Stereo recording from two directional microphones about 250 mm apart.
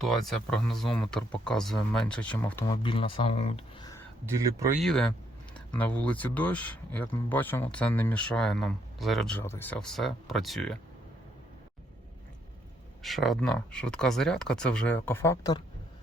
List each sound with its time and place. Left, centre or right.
0.0 s speech: centre
2.8 s speech: left
4.8 s speech: centre
13.0 s speech: centre